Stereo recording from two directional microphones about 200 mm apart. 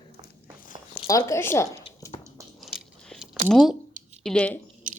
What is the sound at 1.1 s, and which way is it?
Speech, 15° left (ahead or behind).